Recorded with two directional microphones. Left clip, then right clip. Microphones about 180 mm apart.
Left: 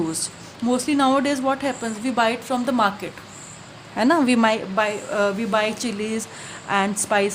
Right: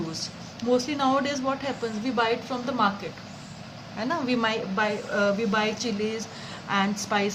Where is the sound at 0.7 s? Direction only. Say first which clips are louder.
Left 4 dB; 70° left (ahead or behind).